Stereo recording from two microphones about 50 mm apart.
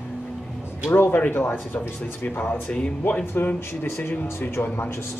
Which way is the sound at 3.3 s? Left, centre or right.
Left.